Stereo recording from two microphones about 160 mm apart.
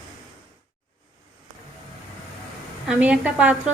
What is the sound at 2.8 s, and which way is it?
Speech, 5° right (ahead or behind).